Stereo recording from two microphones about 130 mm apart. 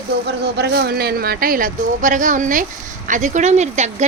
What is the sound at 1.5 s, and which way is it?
Speech, 85° right.